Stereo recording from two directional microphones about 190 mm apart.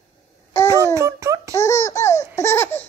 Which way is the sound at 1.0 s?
15° right (ahead or behind).